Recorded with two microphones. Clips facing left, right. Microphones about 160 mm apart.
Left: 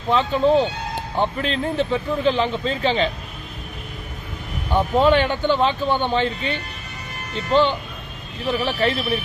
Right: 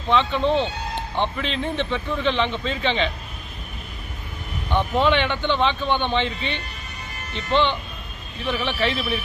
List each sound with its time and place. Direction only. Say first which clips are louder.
0.2 s speech: left 2 dB; 40° left (ahead or behind)
0.4 s speech: left 4 dB; 5° left (ahead or behind)
1.4 s speech: left 3 dB; 40° left (ahead or behind)
4.7 s speech: left 3 dB; 5° left (ahead or behind)
5.0 s speech: left 4 dB; 40° left (ahead or behind)